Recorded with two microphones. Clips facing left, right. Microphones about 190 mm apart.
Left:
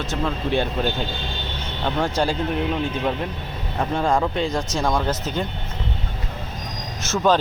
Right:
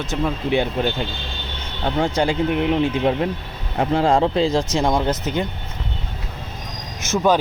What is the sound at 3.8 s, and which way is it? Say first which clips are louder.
Speech: right 4 dB; 25° right (ahead or behind).